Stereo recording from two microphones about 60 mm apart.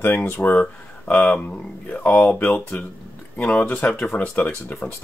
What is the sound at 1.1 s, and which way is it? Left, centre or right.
Speech, left.